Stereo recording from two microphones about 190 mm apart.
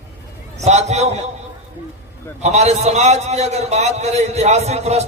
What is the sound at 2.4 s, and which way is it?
A man's voice, 35° right (ahead or behind).